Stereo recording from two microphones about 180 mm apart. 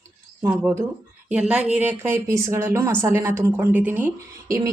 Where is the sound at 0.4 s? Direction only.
15° right (ahead or behind).